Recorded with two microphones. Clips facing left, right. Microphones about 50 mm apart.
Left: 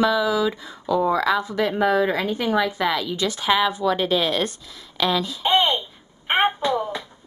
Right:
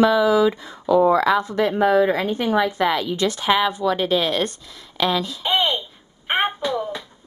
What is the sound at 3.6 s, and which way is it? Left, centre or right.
Speech, centre.